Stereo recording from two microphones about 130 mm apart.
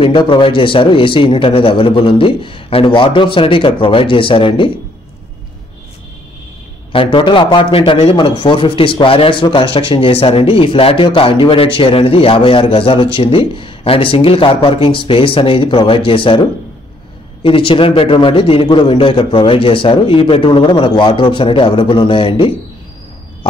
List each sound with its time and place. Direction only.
0.0 s speech: 40° left (ahead or behind)
6.9 s a man's voice: 40° left (ahead or behind)
17.4 s a man's voice: 45° left (ahead or behind)